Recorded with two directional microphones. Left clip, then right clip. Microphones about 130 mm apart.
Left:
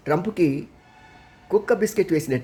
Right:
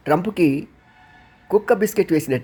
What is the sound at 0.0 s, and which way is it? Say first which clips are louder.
Speech: right 3 dB; 30° right (ahead or behind).